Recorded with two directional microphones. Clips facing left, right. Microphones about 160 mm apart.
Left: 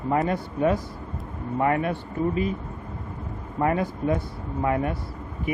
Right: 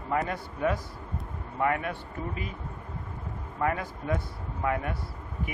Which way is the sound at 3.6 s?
30° left (ahead or behind).